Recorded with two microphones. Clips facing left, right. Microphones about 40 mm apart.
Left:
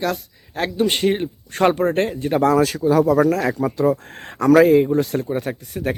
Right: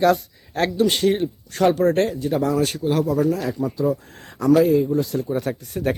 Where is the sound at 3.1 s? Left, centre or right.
Left.